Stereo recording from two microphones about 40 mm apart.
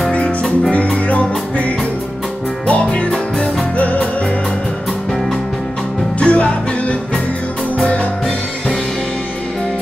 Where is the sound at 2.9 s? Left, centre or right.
Left.